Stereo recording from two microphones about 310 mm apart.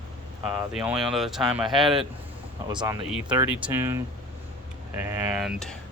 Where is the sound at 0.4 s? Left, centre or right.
Centre.